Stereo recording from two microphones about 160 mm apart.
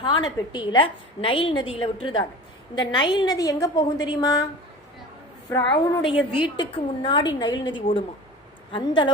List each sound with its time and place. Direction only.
0.0 s a woman's voice: 30° left (ahead or behind)
5.5 s a woman's voice: 25° left (ahead or behind)